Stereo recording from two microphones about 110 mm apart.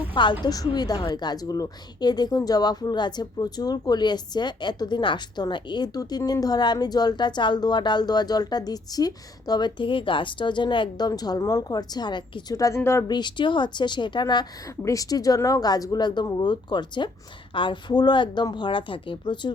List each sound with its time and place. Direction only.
0.1 s a woman's voice: 45° left (ahead or behind)
12.5 s a woman's voice: 30° left (ahead or behind)
13.1 s a woman's voice: 45° left (ahead or behind)
14.8 s a woman's voice: 30° left (ahead or behind); by 19.5 s 50° left (ahead or behind)